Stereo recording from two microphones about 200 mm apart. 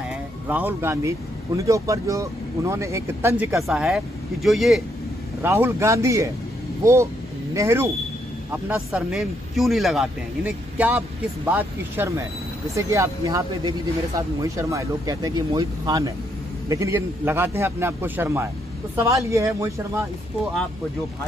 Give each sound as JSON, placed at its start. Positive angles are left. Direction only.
{"t": 0.5, "sound": "speech", "side_deg": -10}
{"t": 5.4, "sound": "speech", "side_deg": -10}